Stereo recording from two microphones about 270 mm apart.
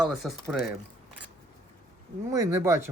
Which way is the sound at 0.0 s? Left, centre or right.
Centre.